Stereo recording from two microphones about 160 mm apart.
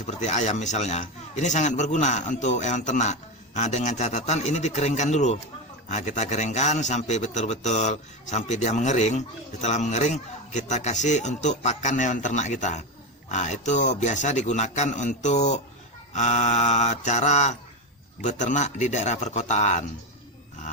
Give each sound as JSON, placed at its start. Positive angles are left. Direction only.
{"t": 0.0, "sound": "a man's voice", "side_deg": 50}